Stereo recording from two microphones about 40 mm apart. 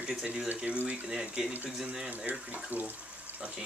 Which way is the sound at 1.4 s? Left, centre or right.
Centre.